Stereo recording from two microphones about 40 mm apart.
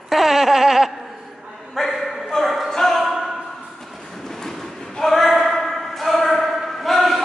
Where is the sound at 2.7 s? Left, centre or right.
Centre.